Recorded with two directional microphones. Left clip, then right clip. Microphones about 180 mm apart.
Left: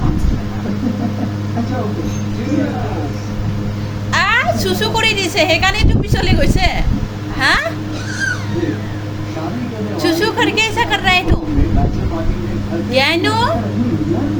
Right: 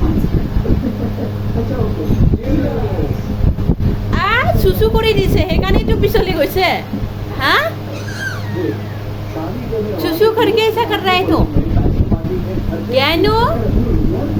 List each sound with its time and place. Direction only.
4.1 s a woman's voice: 10° right (ahead or behind)
10.0 s speech: 15° right (ahead or behind)
12.9 s speech: 15° right (ahead or behind)